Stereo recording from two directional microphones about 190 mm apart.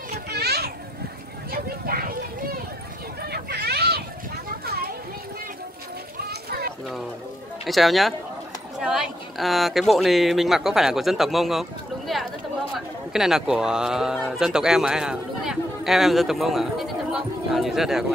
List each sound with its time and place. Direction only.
0.3 s children playing: 55° right (ahead or behind)
1.5 s vehicle: 50° right (ahead or behind)
3.2 s vehicle: 55° right (ahead or behind)
4.5 s a sound: 55° right (ahead or behind)
7.6 s a man's voice: centre (ahead or behind)
12.7 s speech: centre (ahead or behind)